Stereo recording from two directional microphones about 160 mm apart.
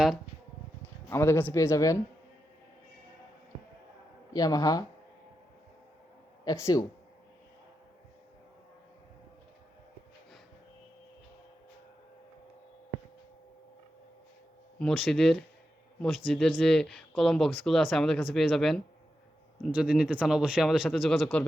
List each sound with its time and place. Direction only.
1.1 s speech: 15° left (ahead or behind)
4.4 s speech: 25° left (ahead or behind)
6.4 s speech: 20° left (ahead or behind)
14.8 s speech: centre (ahead or behind)